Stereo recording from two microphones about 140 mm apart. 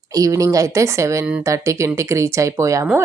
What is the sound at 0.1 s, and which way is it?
Speech, 25° right (ahead or behind).